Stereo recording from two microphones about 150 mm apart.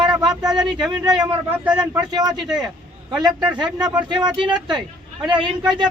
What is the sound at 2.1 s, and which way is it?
Speech, 25° right (ahead or behind).